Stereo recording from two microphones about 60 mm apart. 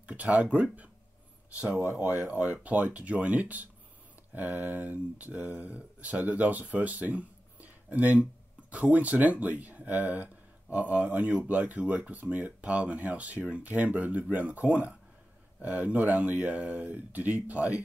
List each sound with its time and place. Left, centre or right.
0.0 s speech: right
2.0 s speech: right